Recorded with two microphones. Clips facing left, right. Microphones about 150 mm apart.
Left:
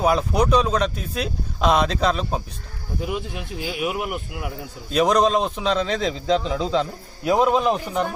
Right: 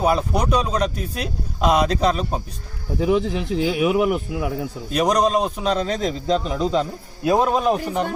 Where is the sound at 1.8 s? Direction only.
40° right (ahead or behind).